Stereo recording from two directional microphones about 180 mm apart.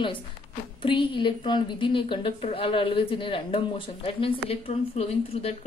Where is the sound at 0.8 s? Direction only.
25° left (ahead or behind).